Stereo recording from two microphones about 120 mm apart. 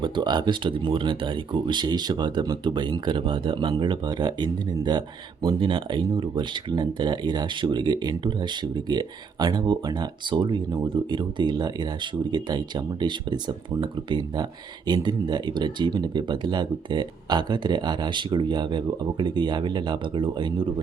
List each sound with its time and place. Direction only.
0.0 s speech: 40° right (ahead or behind)